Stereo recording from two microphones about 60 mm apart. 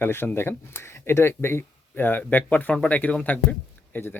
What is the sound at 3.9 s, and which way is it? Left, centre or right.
Speech, left.